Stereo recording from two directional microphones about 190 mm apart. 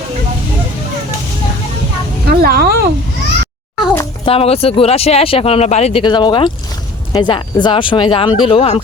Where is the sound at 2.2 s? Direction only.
50° right (ahead or behind).